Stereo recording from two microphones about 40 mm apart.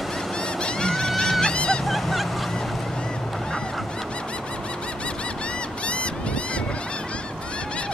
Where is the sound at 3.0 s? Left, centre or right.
Left.